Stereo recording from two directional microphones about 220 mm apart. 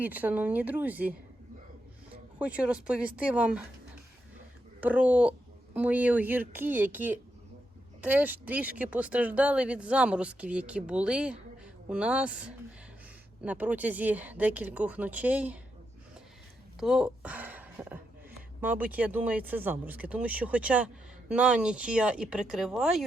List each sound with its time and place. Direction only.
0.0 s speech: 10° right (ahead or behind)
2.4 s speech: 5° right (ahead or behind)
4.8 s speech: 5° right (ahead or behind)
16.8 s speech: 5° right (ahead or behind)